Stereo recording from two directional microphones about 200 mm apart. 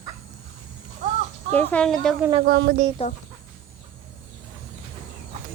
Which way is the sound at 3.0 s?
30° left (ahead or behind).